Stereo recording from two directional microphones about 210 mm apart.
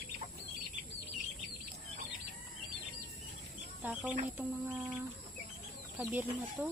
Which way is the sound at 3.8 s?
5° right (ahead or behind).